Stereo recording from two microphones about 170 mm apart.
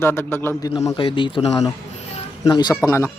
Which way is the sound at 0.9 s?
30° left (ahead or behind).